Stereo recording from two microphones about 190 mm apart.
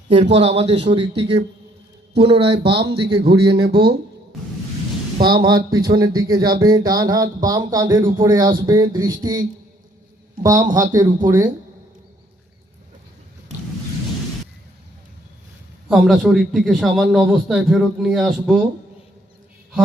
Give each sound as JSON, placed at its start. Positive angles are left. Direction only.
{"t": 0.3, "sound": "speech", "side_deg": -35}
{"t": 3.5, "sound": "speech", "side_deg": -60}
{"t": 5.5, "sound": "speech", "side_deg": -20}
{"t": 10.4, "sound": "speech", "side_deg": -20}
{"t": 15.9, "sound": "a man's voice", "side_deg": 0}